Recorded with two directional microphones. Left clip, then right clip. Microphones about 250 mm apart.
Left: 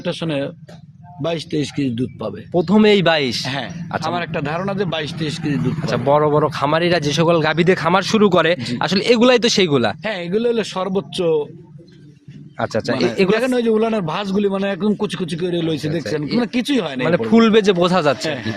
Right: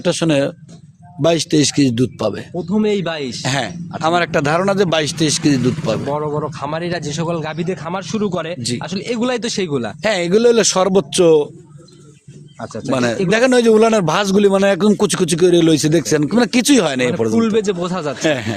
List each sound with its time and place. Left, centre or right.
0.0 s a man's voice: right
2.6 s speech: left
3.4 s a man's voice: right
6.1 s speech: left
10.0 s a man's voice: right
12.5 s speech: left
13.3 s a man's voice: right
17.3 s speech: left
18.2 s a man's voice: right